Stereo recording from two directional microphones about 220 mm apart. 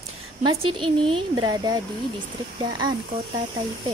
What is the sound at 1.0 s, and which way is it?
Speech, 20° right (ahead or behind).